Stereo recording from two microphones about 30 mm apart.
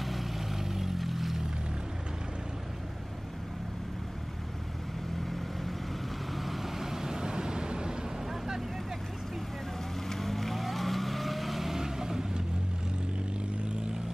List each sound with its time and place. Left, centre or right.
0.0 s vehicle: centre
6.3 s vehicle: centre
6.8 s vehicle: centre
10.0 s vehicle: centre